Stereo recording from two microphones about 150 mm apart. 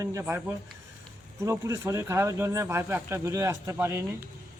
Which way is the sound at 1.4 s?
20° right (ahead or behind).